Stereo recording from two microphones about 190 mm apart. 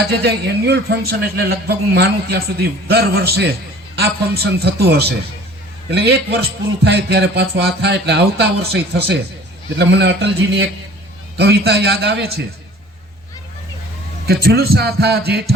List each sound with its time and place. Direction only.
0.1 s a man's voice: 60° right (ahead or behind)
14.3 s a man's voice: 55° right (ahead or behind)